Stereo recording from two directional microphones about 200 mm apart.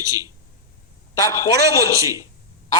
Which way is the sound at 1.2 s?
15° left (ahead or behind).